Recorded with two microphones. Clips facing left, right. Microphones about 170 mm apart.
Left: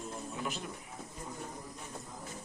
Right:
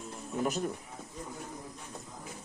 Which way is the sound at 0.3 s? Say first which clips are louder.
Right 10 dB; 45° right (ahead or behind).